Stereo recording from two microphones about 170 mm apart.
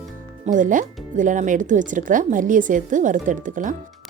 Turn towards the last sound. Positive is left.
turn(degrees=-50)  # may be behind; listen again after turning